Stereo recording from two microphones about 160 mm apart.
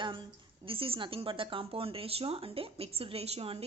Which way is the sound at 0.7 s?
35° right (ahead or behind).